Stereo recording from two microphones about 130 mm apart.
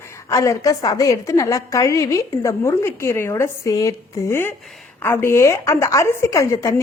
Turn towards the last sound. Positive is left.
turn(degrees=25)  # may be behind; listen again after turning